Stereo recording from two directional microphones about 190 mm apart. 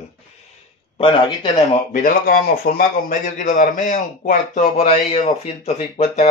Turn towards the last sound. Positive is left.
turn(degrees=35)  # may be behind; listen again after turning